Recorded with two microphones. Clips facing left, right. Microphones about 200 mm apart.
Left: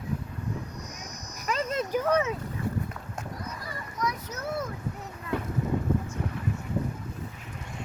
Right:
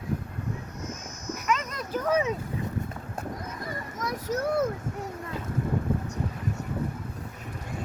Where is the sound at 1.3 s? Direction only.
35° left (ahead or behind).